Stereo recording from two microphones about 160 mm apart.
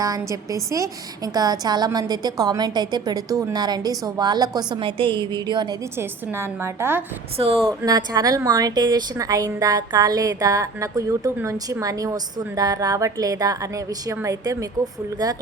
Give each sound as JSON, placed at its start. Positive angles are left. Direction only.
{"t": 0.0, "sound": "a woman's voice", "side_deg": -20}
{"t": 6.0, "sound": "a woman's voice", "side_deg": -15}
{"t": 7.3, "sound": "speech", "side_deg": -35}
{"t": 7.7, "sound": "a woman's voice", "side_deg": -20}